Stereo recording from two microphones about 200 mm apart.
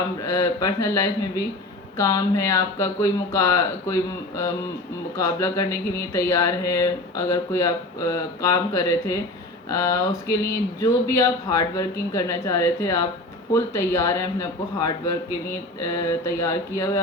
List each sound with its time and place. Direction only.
0.3 s a man's voice: 15° left (ahead or behind)
5.1 s a man's voice: 15° left (ahead or behind)